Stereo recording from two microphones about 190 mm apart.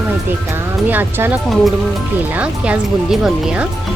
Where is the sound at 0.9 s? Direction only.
10° right (ahead or behind).